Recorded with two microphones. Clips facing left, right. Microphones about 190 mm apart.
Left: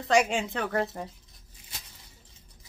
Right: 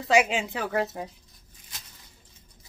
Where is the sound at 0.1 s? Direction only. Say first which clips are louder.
Right 1 dB; 5° right (ahead or behind).